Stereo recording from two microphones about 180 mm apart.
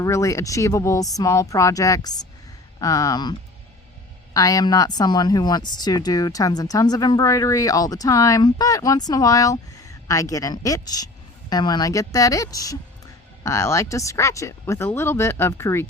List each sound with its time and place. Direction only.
0.0 s speech: 15° left (ahead or behind)
4.4 s speech: 20° left (ahead or behind)